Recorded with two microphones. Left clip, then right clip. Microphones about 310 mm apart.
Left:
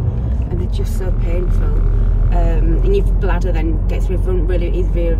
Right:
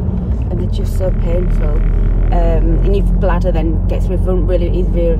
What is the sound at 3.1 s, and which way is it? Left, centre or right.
Speech, centre.